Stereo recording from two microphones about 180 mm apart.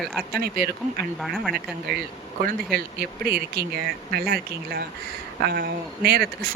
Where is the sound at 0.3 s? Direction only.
60° right (ahead or behind).